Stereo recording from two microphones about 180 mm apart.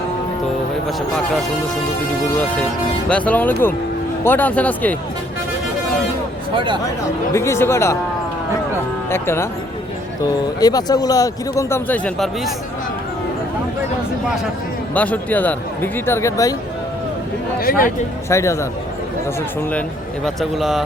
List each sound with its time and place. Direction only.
3.1 s speech: 10° left (ahead or behind)
6.5 s speech: 25° right (ahead or behind)
7.3 s speech: 15° left (ahead or behind)
9.0 s speech: 15° left (ahead or behind)
10.6 s speech: 20° left (ahead or behind); by 12.5 s 5° left (ahead or behind)
14.9 s speech: 10° left (ahead or behind)
17.6 s speech: 50° left (ahead or behind)
18.3 s speech: 15° left (ahead or behind)
20.2 s speech: centre (ahead or behind)